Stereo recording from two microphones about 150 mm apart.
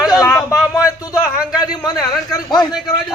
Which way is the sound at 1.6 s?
25° left (ahead or behind).